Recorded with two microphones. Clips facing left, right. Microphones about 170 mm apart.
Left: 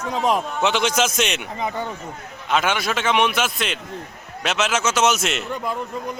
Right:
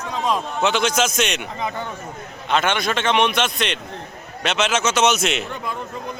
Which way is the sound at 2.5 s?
5° left (ahead or behind).